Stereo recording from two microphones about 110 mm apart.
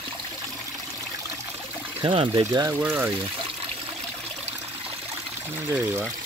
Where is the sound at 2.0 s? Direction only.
50° right (ahead or behind).